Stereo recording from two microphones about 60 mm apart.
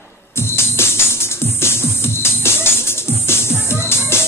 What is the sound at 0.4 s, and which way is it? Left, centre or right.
Music, left.